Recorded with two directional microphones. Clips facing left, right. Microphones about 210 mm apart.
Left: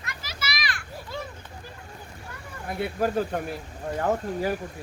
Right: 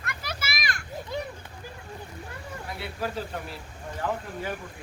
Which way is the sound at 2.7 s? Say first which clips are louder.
Left 8 dB; 50° left (ahead or behind).